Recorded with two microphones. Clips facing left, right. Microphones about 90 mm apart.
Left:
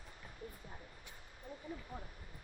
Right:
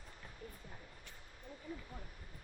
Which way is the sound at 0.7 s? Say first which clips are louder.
Left 1 dB; 20° left (ahead or behind).